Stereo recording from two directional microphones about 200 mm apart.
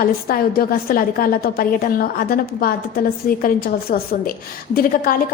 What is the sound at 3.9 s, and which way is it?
A woman's voice, 50° left (ahead or behind).